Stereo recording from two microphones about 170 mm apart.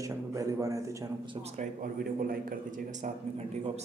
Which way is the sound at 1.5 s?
50° right (ahead or behind).